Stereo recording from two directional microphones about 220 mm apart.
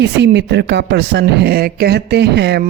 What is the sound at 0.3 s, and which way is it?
Speech, 50° right (ahead or behind).